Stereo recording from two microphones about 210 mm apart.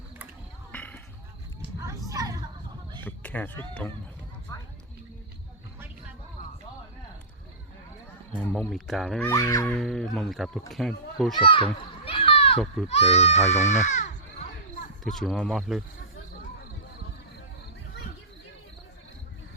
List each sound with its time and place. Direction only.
0.7 s basketball bounce: 5° left (ahead or behind)
2.0 s hubbub: 15° right (ahead or behind)
3.0 s speech: 10° left (ahead or behind)
4.5 s a sound: 15° left (ahead or behind)
8.3 s speech: 5° left (ahead or behind)
9.3 s speech: 15° left (ahead or behind)
9.7 s speech: centre (ahead or behind)
11.3 s a child's voice: 25° left (ahead or behind)
15.0 s speech: centre (ahead or behind)